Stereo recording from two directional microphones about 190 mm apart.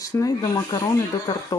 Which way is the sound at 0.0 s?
15° left (ahead or behind).